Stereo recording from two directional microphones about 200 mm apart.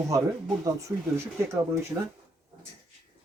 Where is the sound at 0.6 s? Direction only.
15° right (ahead or behind).